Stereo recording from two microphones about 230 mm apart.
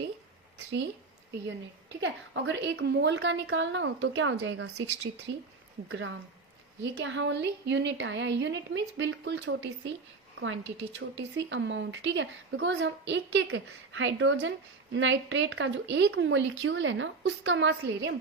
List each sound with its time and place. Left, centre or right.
2.0 s speech: right
4.6 s speech: right
5.9 s a woman's voice: right